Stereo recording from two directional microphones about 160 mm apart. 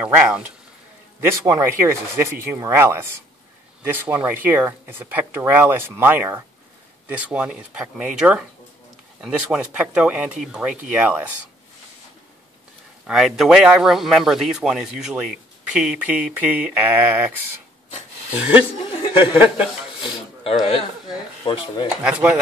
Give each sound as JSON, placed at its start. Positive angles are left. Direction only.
{"t": 0.0, "sound": "speech", "side_deg": -10}
{"t": 13.0, "sound": "speech", "side_deg": 0}
{"t": 18.3, "sound": "speech", "side_deg": -5}
{"t": 18.9, "sound": "chuckle", "side_deg": 35}
{"t": 21.5, "sound": "speech", "side_deg": 35}
{"t": 22.0, "sound": "speech", "side_deg": -10}